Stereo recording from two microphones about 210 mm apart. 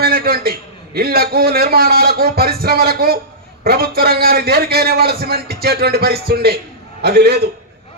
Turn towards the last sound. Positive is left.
turn(degrees=-50)  # may be behind; listen again after turning